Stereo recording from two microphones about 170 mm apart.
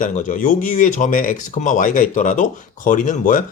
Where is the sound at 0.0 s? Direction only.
50° left (ahead or behind).